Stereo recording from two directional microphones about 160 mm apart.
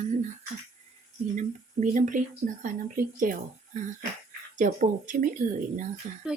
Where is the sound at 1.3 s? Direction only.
55° right (ahead or behind).